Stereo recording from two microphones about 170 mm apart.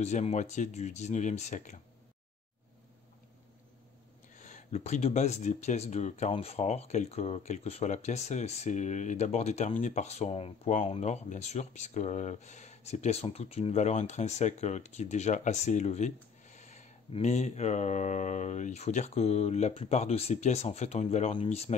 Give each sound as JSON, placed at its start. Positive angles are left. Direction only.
{"t": 0.0, "sound": "speech", "side_deg": 40}
{"t": 4.4, "sound": "speech", "side_deg": 45}